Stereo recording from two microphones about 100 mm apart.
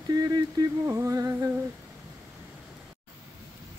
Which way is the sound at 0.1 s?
40° right (ahead or behind).